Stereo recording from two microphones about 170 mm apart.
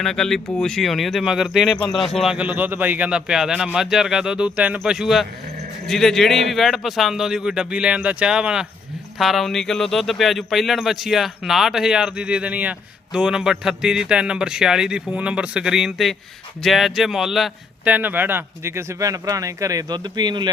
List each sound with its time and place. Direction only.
0.0 s a man's voice: centre (ahead or behind); by 20.5 s 25° right (ahead or behind)